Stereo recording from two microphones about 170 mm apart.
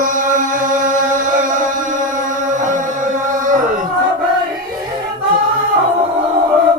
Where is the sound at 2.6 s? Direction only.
50° right (ahead or behind).